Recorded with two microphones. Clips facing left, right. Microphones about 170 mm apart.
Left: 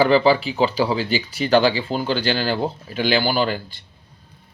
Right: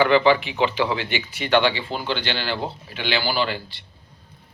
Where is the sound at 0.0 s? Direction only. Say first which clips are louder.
Left 1 dB; 35° left (ahead or behind).